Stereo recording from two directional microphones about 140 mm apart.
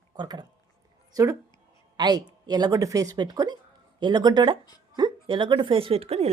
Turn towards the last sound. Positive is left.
turn(degrees=-45)  # may be behind; listen again after turning